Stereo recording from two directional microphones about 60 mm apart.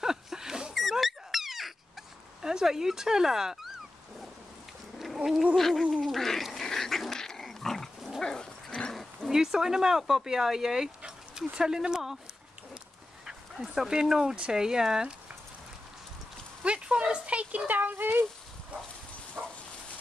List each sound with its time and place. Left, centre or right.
0.0 s a sound: centre
0.7 s dog: centre
2.4 s speech: centre
4.9 s a sound: centre
5.6 s duck: centre
5.9 s dog: centre
8.9 s speech: centre
11.0 s dog: centre
11.5 s speech: centre
13.7 s speech: centre
16.6 s a sound: centre
19.4 s a sound: centre